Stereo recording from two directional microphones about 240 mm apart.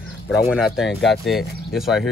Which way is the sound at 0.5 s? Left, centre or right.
Centre.